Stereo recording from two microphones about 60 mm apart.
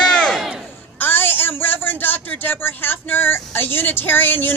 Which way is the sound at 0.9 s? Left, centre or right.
Left.